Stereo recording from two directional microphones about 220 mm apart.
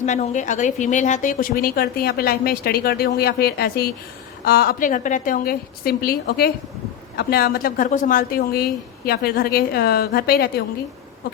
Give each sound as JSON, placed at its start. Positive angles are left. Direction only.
{"t": 0.0, "sound": "a woman's voice", "side_deg": 30}